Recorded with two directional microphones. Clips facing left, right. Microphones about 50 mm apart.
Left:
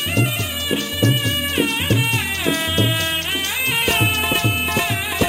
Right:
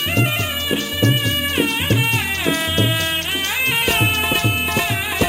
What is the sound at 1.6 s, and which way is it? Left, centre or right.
Music, centre.